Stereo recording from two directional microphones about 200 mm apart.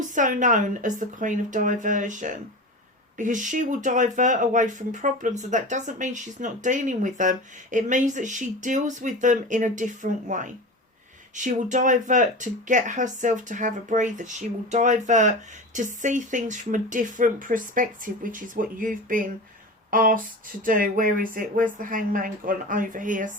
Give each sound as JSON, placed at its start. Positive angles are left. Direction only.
{"t": 0.1, "sound": "speech", "side_deg": -40}